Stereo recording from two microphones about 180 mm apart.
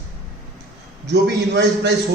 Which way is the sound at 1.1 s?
70° right (ahead or behind).